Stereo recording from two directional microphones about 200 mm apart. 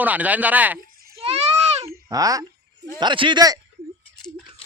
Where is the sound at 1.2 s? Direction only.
30° right (ahead or behind).